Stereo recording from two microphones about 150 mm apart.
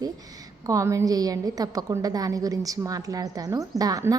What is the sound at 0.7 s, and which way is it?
A woman's voice, 20° right (ahead or behind).